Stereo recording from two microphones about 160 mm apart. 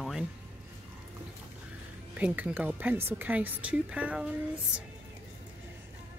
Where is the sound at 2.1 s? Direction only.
10° right (ahead or behind).